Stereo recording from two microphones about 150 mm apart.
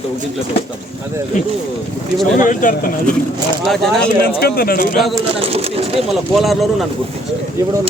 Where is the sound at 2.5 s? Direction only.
60° left (ahead or behind).